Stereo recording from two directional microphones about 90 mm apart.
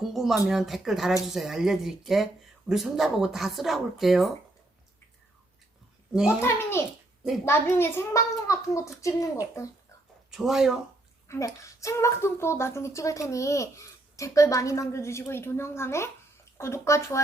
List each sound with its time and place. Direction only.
0.1 s speech: 5° right (ahead or behind)
6.4 s a child's voice: 30° left (ahead or behind)
10.3 s speech: 5° right (ahead or behind)
11.3 s speech: 35° left (ahead or behind)